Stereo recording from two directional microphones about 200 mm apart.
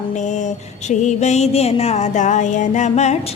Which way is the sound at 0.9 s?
35° left (ahead or behind).